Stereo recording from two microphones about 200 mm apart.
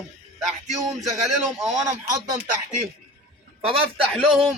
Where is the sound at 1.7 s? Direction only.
20° right (ahead or behind).